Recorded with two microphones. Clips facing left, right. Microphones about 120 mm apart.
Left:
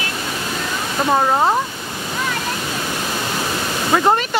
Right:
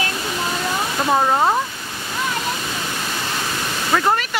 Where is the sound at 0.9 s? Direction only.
5° left (ahead or behind).